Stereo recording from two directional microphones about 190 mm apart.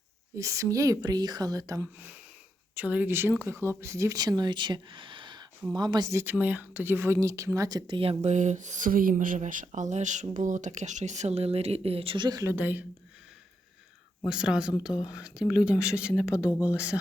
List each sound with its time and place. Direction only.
0.3 s speech: 15° right (ahead or behind)
14.3 s speech: 5° right (ahead or behind)